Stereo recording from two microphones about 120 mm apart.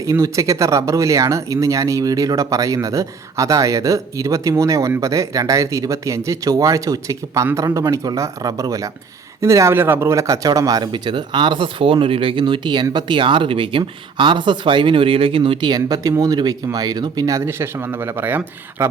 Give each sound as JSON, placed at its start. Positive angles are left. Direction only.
{"t": 0.0, "sound": "speech", "side_deg": -25}